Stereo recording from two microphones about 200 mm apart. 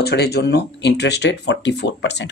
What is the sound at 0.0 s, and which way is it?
Speech, 55° left (ahead or behind).